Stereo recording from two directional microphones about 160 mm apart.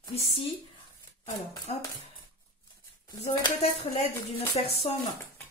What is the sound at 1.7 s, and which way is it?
Speech, 40° left (ahead or behind).